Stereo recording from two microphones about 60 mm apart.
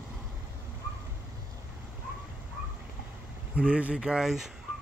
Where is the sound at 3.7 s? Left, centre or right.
Right.